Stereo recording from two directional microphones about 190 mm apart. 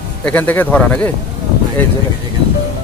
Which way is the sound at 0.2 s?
10° left (ahead or behind).